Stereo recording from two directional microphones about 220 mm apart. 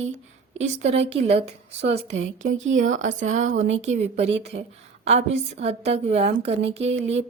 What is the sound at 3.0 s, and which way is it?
Speech, 35° right (ahead or behind).